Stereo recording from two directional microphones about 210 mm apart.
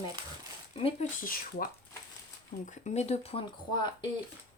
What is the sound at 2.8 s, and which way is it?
Speech, 30° left (ahead or behind).